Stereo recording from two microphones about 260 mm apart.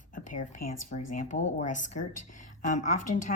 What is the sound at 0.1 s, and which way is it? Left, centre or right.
A woman's voice, left.